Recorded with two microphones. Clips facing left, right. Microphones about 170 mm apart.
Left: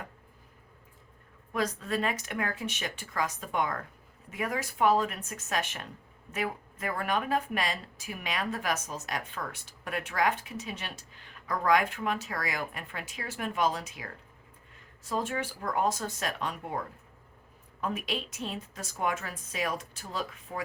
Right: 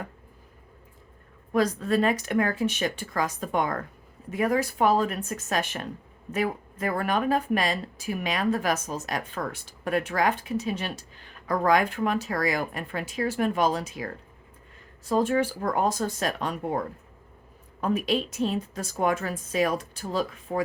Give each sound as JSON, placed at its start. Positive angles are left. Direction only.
{"t": 1.5, "sound": "speech", "side_deg": -35}